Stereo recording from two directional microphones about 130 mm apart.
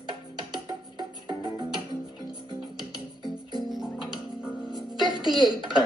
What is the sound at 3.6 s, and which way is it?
Music, centre (ahead or behind).